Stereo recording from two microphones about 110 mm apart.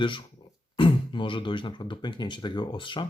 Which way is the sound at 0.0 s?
50° left (ahead or behind).